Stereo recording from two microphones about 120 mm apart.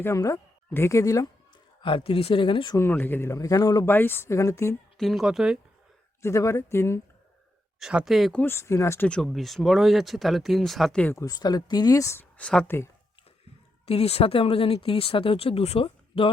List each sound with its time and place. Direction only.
0.0 s speech: 25° left (ahead or behind)
1.8 s speech: 50° left (ahead or behind)
2.7 s speech: 20° left (ahead or behind)
3.8 s speech: 15° left (ahead or behind)
4.9 s speech: centre (ahead or behind)
6.2 s speech: 25° left (ahead or behind)
7.8 s speech: 5° right (ahead or behind)
8.3 s speech: 15° left (ahead or behind)
9.0 s speech: 5° left (ahead or behind)
11.0 s speech: 25° left (ahead or behind)
12.4 s speech: 10° left (ahead or behind)
12.6 s speech: 20° left (ahead or behind)
13.8 s speech: 55° left (ahead or behind)